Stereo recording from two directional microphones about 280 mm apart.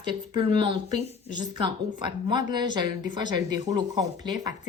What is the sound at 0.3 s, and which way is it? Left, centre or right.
A woman's voice, centre.